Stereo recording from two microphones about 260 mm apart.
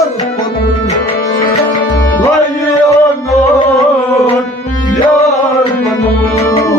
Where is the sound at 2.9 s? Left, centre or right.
Centre.